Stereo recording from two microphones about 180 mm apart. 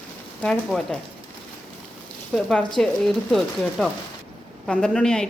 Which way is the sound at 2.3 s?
5° left (ahead or behind).